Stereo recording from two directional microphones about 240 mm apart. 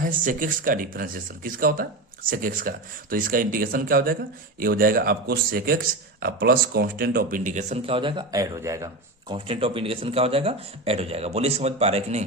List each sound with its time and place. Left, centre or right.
0.0 s speech: right